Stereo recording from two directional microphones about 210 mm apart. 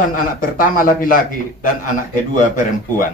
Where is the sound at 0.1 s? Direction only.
40° left (ahead or behind).